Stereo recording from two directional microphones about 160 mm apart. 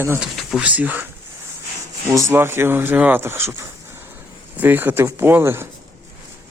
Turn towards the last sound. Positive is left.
turn(degrees=-15)  # may be behind; listen again after turning